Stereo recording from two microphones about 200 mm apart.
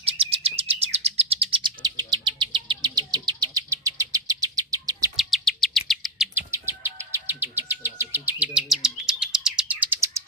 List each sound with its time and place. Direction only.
0.0 s bird: 30° right (ahead or behind)
5.1 s chirp: centre (ahead or behind)
6.3 s bird vocalization: 10° right (ahead or behind)